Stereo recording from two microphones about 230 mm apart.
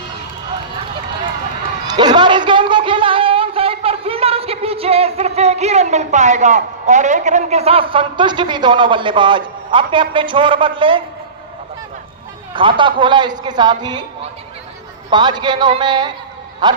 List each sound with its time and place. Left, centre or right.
1.9 s a sound: centre
12.5 s a woman's voice: right
15.1 s a woman's voice: centre